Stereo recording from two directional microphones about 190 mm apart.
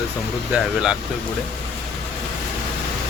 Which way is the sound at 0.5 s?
5° right (ahead or behind).